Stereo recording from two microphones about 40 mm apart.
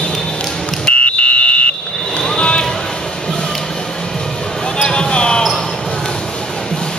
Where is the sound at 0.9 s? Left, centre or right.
Left.